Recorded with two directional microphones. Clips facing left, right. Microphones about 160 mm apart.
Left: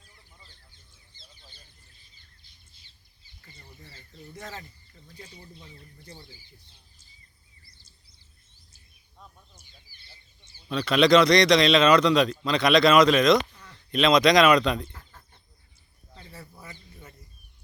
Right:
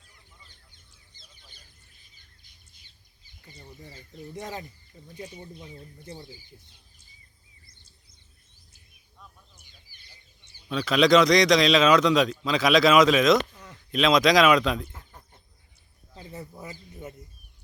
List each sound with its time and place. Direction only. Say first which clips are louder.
3.4 s a sound: right 5 dB; 15° right (ahead or behind)
5.0 s speech: right 7 dB; 15° right (ahead or behind)
10.7 s speech: even; centre (ahead or behind)
16.1 s speech: right 6 dB; 20° right (ahead or behind)
16.9 s bird: right 9 dB; 20° right (ahead or behind)